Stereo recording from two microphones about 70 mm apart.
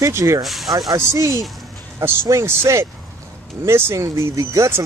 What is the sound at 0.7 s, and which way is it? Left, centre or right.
Speech, right.